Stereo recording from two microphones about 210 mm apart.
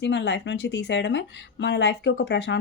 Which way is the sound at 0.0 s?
55° left (ahead or behind).